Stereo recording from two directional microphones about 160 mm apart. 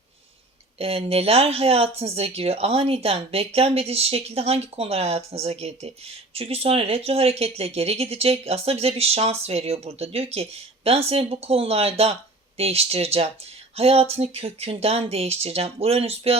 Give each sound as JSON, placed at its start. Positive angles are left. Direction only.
{"t": 0.8, "sound": "speech", "side_deg": -40}